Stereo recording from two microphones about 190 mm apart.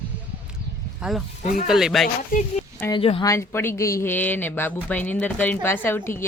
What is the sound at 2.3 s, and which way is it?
Speech, 45° left (ahead or behind).